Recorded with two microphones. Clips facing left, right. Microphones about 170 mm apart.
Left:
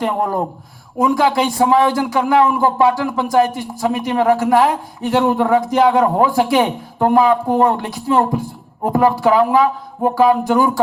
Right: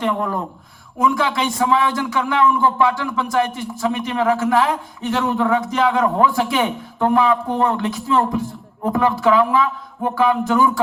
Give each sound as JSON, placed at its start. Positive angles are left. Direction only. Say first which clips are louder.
{"t": 0.0, "sound": "a man's voice", "louder": "left 3 dB", "side_deg": 35}